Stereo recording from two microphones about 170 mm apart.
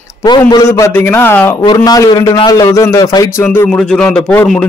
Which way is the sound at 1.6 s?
25° left (ahead or behind).